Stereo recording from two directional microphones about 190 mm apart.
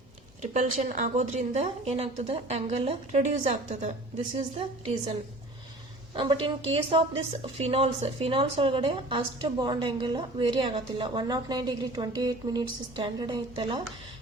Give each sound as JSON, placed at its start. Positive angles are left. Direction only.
{"t": 0.5, "sound": "a woman's voice", "side_deg": -40}
{"t": 6.1, "sound": "a woman's voice", "side_deg": -30}